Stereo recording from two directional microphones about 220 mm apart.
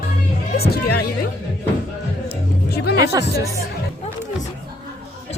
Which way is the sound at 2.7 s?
45° left (ahead or behind).